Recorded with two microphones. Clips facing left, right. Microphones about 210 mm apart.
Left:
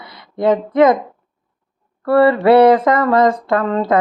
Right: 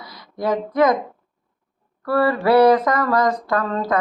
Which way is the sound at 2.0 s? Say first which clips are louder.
Left 7 dB; 25° left (ahead or behind).